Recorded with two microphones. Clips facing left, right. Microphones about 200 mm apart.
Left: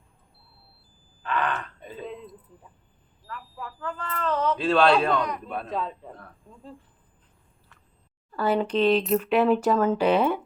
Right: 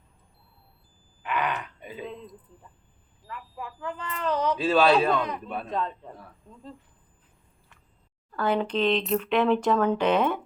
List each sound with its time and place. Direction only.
1.2 s wail: 10° right (ahead or behind)
3.2 s speech: 15° right (ahead or behind)
4.5 s speech: 5° right (ahead or behind)
5.1 s speech: 25° right (ahead or behind)
5.5 s speech: centre (ahead or behind)
8.3 s speech: 5° left (ahead or behind)